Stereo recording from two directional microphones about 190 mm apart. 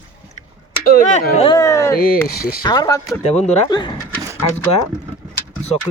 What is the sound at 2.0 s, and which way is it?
Speech, 55° left (ahead or behind).